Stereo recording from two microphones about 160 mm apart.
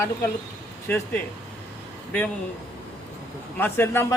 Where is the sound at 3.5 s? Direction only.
15° left (ahead or behind).